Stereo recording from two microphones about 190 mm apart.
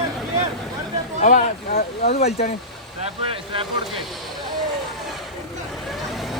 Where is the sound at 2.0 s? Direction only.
35° left (ahead or behind).